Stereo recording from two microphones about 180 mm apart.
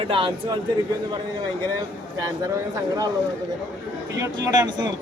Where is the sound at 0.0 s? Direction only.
30° right (ahead or behind).